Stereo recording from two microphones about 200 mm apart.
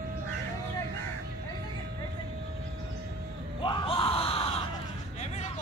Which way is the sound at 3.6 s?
25° left (ahead or behind).